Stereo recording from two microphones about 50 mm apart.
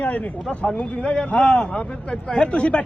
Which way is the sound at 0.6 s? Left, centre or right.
Centre.